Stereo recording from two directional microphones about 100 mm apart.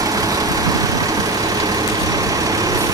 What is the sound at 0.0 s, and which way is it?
Vehicle, 35° right (ahead or behind).